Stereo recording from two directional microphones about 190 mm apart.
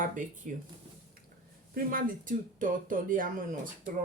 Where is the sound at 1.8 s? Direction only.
50° right (ahead or behind).